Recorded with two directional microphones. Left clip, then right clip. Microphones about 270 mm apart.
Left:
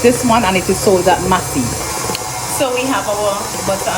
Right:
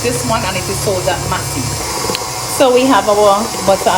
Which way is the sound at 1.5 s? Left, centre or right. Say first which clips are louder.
Even; centre.